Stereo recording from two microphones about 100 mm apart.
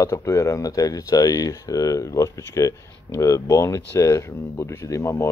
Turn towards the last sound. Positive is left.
turn(degrees=30)  # may be behind; listen again after turning